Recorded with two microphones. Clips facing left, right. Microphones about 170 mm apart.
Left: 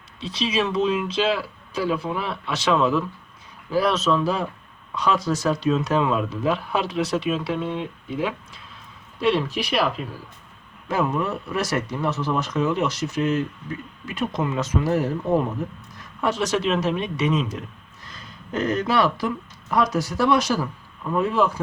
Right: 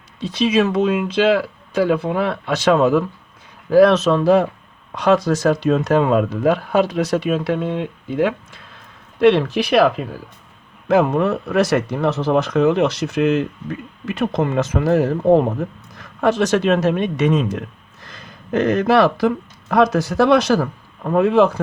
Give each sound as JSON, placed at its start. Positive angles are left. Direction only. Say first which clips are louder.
{"t": 0.2, "sound": "speech", "louder": "right 7 dB", "side_deg": -50}
{"t": 16.2, "sound": "speech", "louder": "right 6 dB", "side_deg": -60}
{"t": 18.6, "sound": "speech", "louder": "right 6 dB", "side_deg": -60}